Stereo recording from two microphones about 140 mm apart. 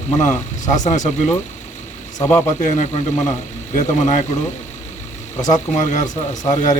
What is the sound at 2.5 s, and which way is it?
Speech, 60° left (ahead or behind).